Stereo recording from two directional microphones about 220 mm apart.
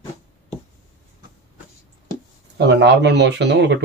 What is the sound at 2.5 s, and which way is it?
Speech, 50° right (ahead or behind).